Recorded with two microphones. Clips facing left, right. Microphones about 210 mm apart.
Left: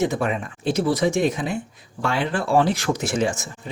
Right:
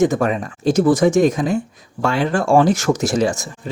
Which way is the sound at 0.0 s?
45° right (ahead or behind).